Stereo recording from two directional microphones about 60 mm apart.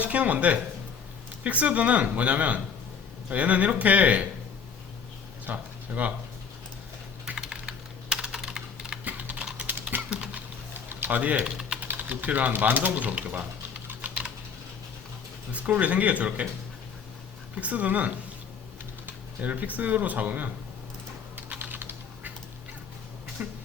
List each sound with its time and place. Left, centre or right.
0.0 s speech: right
5.5 s speech: right
7.3 s computer keyboard: centre
9.0 s typing: right
10.1 s a sound: centre
10.8 s a sound: right
11.4 s typing: centre
11.8 s typing: right
15.5 s speech: right
17.6 s speech: right
21.5 s typing: right
23.4 s a sound: right